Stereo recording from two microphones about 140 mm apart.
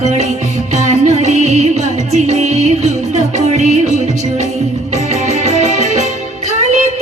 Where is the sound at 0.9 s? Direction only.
55° right (ahead or behind).